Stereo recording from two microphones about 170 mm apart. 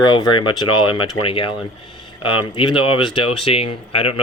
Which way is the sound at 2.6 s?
30° left (ahead or behind).